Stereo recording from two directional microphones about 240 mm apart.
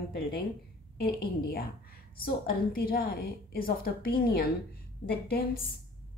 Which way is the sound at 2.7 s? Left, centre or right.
Left.